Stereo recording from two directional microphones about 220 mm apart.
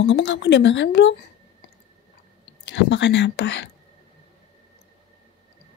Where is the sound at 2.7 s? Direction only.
55° left (ahead or behind).